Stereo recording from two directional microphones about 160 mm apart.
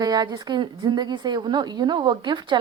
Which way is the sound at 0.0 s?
25° right (ahead or behind).